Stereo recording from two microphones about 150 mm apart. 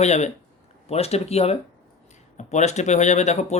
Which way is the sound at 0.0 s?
50° left (ahead or behind).